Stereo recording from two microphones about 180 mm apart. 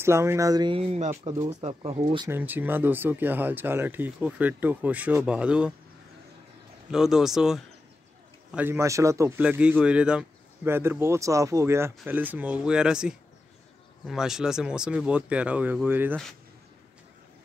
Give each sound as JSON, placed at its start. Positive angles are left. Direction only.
{"t": 0.0, "sound": "speech", "side_deg": -15}
{"t": 2.2, "sound": "speech", "side_deg": -10}
{"t": 6.9, "sound": "speech", "side_deg": -5}